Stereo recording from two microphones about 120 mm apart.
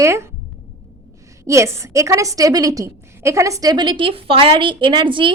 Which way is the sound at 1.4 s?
25° right (ahead or behind).